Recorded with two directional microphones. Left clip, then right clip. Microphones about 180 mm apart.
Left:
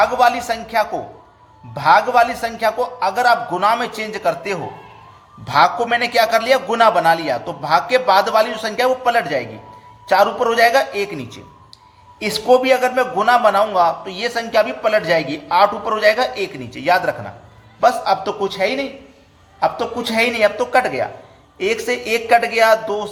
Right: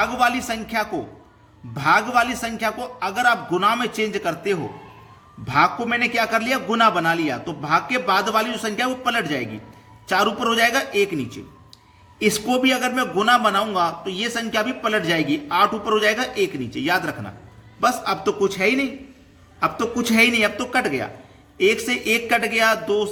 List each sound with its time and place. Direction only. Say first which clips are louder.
0.0 s a man's voice: left 6 dB; 20° right (ahead or behind)